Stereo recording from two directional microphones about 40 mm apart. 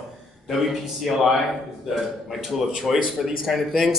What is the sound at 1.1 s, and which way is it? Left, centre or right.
Speech, centre.